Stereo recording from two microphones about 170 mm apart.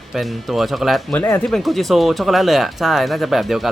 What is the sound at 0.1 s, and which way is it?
Speech, centre (ahead or behind).